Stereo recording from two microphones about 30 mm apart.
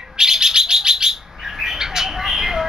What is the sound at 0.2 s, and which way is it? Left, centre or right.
Bird, centre.